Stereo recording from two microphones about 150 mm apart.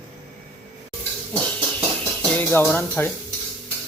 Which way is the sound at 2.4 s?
15° left (ahead or behind).